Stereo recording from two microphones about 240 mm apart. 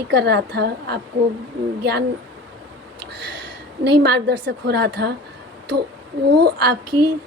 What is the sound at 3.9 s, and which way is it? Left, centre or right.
A woman's voice, right.